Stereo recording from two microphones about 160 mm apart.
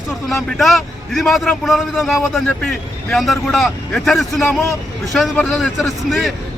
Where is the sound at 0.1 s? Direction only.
Centre (ahead or behind).